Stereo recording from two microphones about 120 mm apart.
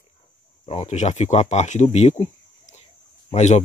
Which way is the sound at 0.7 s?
65° left (ahead or behind).